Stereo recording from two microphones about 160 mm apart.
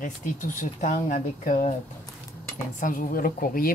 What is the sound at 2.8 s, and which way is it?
Speech, 55° left (ahead or behind).